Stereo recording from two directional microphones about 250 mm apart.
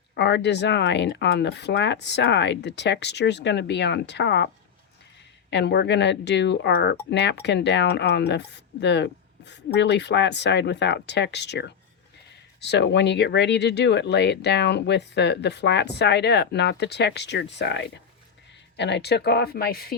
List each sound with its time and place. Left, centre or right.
0.1 s speech: left